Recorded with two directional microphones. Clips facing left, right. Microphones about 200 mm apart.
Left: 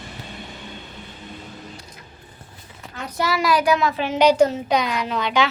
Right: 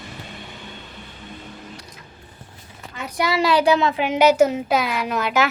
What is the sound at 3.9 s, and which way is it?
A woman's voice, 15° right (ahead or behind).